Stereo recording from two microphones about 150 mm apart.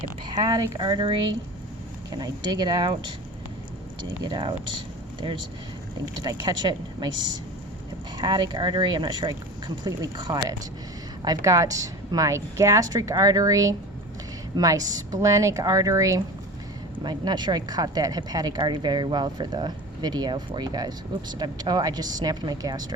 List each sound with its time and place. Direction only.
0.3 s speech: 25° right (ahead or behind)
4.2 s speech: 30° right (ahead or behind)
6.2 s speech: 25° right (ahead or behind)
8.2 s speech: 30° right (ahead or behind)
11.4 s speech: 20° right (ahead or behind)